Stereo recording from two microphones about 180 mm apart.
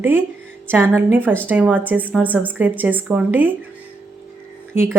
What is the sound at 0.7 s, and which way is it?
A woman's voice, 10° right (ahead or behind).